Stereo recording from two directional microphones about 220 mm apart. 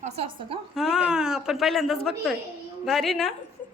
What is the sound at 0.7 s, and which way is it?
A woman's voice, centre (ahead or behind).